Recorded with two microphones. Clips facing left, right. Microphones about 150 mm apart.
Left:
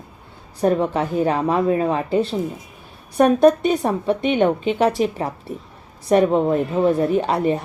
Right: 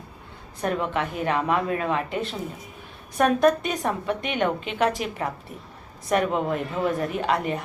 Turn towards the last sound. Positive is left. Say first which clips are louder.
# left 6 dB
turn(degrees=35)  # may be behind; listen again after turning